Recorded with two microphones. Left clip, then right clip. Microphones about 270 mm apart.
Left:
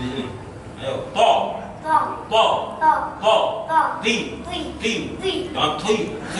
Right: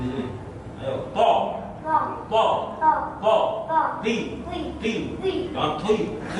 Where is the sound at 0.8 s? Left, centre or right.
Centre.